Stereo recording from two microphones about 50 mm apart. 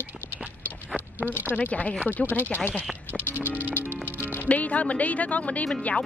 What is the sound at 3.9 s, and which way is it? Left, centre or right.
Music, left.